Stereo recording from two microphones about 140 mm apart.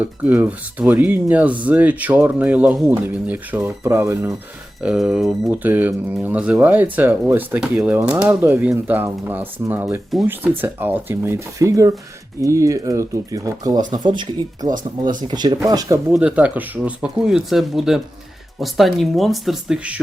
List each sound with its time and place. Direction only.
0.0 s speech: 10° right (ahead or behind)
4.8 s speech: 5° right (ahead or behind); by 16.0 s 25° right (ahead or behind)
16.1 s speech: 10° right (ahead or behind)